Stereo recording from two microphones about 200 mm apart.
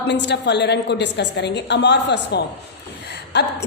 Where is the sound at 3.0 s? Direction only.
60° left (ahead or behind).